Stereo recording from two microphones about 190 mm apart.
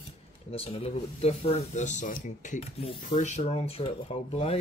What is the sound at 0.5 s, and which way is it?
Speech, 30° left (ahead or behind).